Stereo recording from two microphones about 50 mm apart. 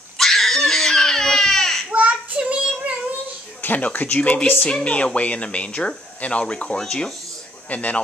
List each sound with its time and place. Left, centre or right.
0.2 s crying: centre
1.9 s child singing: right
3.6 s speech: left; by 7.1 s centre
7.7 s speech: left